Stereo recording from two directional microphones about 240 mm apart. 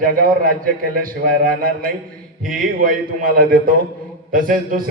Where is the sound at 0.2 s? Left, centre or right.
Right.